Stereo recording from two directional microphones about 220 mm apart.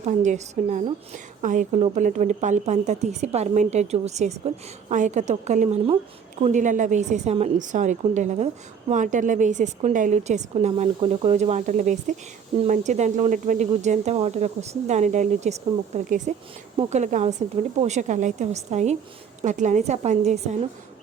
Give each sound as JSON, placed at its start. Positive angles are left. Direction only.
{"t": 0.0, "sound": "a woman's voice", "side_deg": -30}